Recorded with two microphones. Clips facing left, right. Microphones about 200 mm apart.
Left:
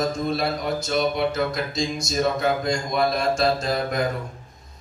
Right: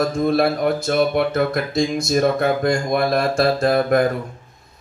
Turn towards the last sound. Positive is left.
turn(degrees=-55)  # may be behind; listen again after turning